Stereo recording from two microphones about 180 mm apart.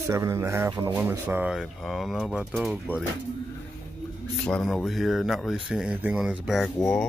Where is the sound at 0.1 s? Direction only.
15° right (ahead or behind).